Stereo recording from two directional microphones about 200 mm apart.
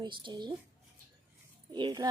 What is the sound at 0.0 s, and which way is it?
Speech, 25° right (ahead or behind).